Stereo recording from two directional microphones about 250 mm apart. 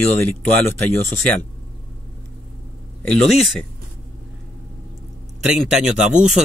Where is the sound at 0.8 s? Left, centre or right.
Centre.